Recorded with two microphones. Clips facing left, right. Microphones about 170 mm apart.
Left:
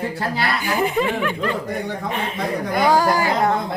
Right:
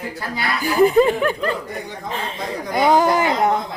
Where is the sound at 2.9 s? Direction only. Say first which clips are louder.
Right 3 dB; 20° right (ahead or behind).